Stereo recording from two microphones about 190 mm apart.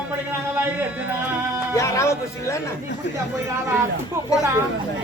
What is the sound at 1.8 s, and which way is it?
Speech, 15° left (ahead or behind).